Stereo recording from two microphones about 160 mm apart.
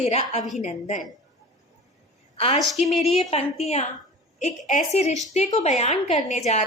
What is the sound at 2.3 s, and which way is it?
A woman's voice, 35° left (ahead or behind).